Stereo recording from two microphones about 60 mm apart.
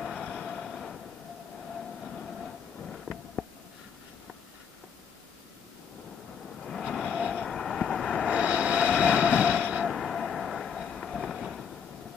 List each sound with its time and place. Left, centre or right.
0.0 s vehicle: centre
2.1 s a sound: centre
6.9 s vehicle: centre
8.3 s vehicle: centre
9.8 s vehicle: centre